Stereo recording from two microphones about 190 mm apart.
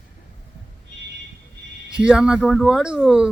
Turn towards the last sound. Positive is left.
turn(degrees=-5)  # may be behind; listen again after turning